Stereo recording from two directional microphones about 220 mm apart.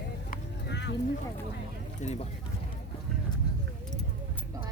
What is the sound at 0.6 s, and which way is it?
Clip-clop, 50° left (ahead or behind).